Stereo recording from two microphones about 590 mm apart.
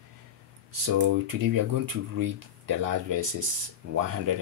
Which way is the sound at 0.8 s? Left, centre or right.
Right.